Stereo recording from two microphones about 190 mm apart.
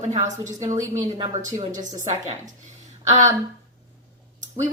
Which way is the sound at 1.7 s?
40° right (ahead or behind).